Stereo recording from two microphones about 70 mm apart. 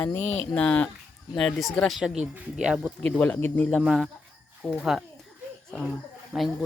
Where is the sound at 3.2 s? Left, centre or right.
Left.